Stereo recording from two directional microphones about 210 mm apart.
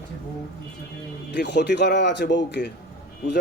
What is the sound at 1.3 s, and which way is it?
Speech, 55° left (ahead or behind).